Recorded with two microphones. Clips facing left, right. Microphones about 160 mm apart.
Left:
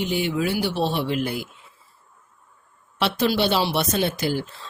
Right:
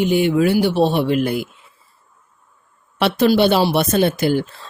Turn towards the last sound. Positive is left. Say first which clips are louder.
# right 7 dB
turn(degrees=-55)  # may be behind; listen again after turning